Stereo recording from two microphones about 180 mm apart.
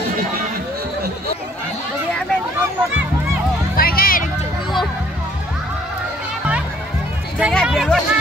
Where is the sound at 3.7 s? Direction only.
55° left (ahead or behind).